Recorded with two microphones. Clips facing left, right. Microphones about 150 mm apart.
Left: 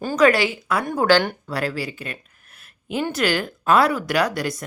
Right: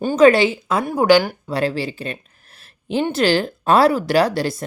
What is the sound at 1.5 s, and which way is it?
Speech, 25° right (ahead or behind).